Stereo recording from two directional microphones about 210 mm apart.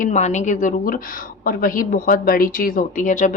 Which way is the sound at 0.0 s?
35° left (ahead or behind).